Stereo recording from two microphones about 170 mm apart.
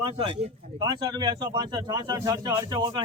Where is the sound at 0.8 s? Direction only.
25° right (ahead or behind).